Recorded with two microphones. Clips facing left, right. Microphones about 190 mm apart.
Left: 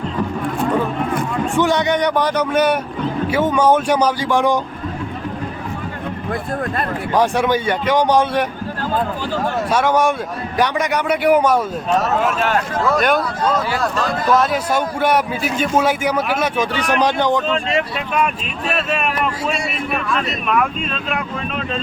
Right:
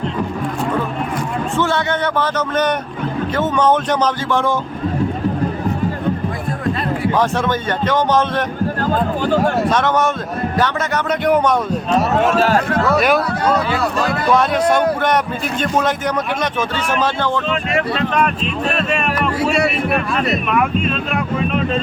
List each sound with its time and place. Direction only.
1.5 s speech: 15° left (ahead or behind)
7.1 s speech: 10° left (ahead or behind)
9.6 s speech: 10° left (ahead or behind)
12.2 s speech: 35° right (ahead or behind)
12.9 s speech: centre (ahead or behind)
14.3 s speech: 5° left (ahead or behind); by 17.8 s 25° left (ahead or behind)
18.7 s speech: 5° left (ahead or behind)
20.3 s speech: centre (ahead or behind)